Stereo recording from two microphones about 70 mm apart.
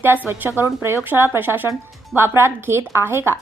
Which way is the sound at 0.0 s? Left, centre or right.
Right.